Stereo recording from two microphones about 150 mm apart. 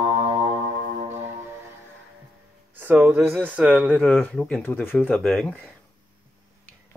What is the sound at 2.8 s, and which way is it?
Speech, 10° right (ahead or behind).